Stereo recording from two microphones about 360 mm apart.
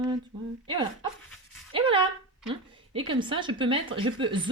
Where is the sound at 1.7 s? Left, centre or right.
Centre.